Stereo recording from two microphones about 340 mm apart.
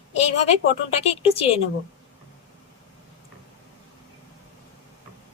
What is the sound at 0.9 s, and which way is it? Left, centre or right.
Speech, centre.